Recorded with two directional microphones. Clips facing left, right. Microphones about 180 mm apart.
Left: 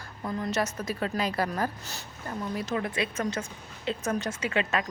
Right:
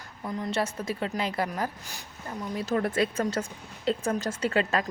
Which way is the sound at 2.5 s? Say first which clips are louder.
Right 5 dB; 40° right (ahead or behind).